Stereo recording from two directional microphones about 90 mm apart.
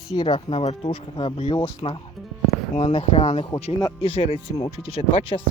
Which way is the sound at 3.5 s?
40° left (ahead or behind).